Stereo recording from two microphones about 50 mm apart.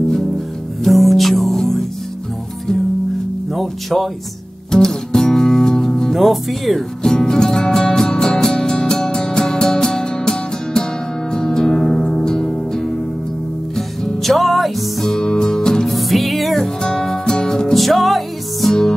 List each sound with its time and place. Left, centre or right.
0.8 s music: centre
3.5 s speech: centre
4.6 s music: centre
7.0 s music: centre
16.6 s music: centre